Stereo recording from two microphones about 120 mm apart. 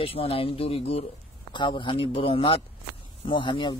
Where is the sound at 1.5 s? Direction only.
40° left (ahead or behind).